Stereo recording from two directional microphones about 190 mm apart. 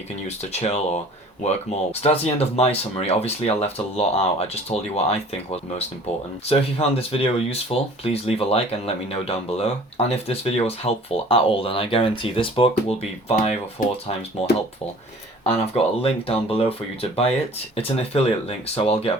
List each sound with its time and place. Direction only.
0.3 s speech: 35° left (ahead or behind)
15.4 s speech: 30° left (ahead or behind)